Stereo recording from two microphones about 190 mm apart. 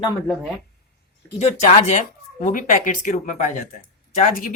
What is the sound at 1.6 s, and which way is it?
Speech, 40° left (ahead or behind).